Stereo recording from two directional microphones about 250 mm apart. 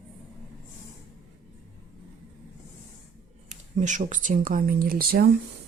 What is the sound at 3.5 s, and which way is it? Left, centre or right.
Speech, right.